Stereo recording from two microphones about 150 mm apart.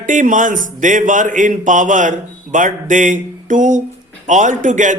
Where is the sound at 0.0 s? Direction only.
60° right (ahead or behind).